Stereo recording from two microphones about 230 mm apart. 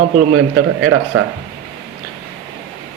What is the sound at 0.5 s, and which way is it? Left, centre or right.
Speech, right.